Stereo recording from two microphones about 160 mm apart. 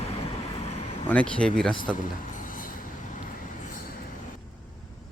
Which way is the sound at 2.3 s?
55° left (ahead or behind).